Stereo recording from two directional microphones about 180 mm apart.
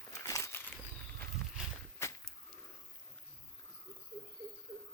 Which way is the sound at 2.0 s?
15° left (ahead or behind).